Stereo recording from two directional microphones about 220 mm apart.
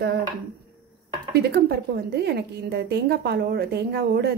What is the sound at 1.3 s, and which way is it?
A woman's voice, 45° right (ahead or behind).